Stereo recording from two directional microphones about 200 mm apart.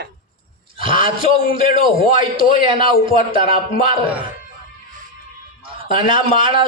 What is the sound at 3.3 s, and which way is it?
Speech, 45° left (ahead or behind).